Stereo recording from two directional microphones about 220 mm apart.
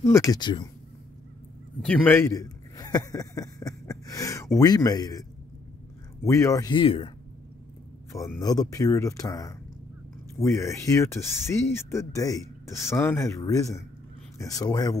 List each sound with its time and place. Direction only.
0.1 s speech: 15° left (ahead or behind)
1.9 s a man's voice: 10° left (ahead or behind)
6.2 s speech: 15° left (ahead or behind)
8.1 s speech: 15° left (ahead or behind)